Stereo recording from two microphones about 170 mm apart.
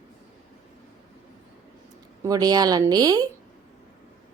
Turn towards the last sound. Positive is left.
turn(degrees=-20)  # may be behind; listen again after turning